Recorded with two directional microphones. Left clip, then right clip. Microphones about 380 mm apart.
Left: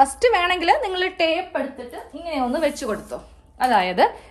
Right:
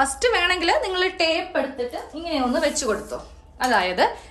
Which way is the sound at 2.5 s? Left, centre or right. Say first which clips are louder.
Right 2 dB; centre.